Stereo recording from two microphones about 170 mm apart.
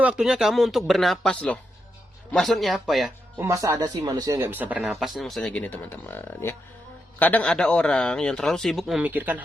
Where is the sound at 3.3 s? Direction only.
15° right (ahead or behind).